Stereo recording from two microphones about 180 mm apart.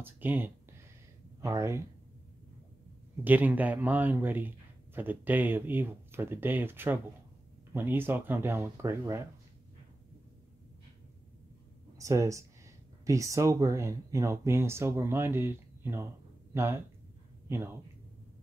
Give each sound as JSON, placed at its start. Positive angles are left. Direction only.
{"t": 0.0, "sound": "a man's voice", "side_deg": -10}
{"t": 3.3, "sound": "a man's voice", "side_deg": -10}
{"t": 12.0, "sound": "a man's voice", "side_deg": -15}